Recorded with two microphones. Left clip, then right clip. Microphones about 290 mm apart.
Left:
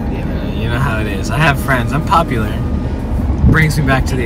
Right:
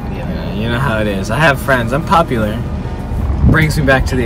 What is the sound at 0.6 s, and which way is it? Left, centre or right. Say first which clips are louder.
Speech: right 4 dB; centre.